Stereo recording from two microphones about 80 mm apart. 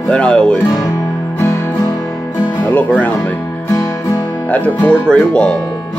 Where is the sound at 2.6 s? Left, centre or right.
Left.